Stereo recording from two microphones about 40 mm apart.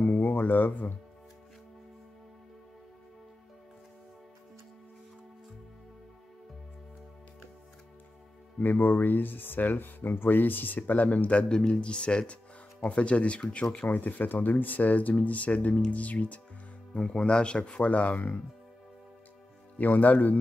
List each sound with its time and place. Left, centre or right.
0.0 s music: left
8.5 s speech: left
13.8 s speech: left
16.9 s speech: left
19.8 s speech: left